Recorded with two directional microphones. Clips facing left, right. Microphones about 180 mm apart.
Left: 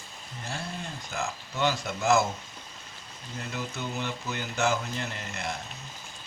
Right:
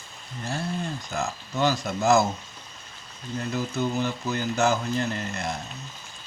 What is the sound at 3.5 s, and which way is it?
Speech, 40° right (ahead or behind).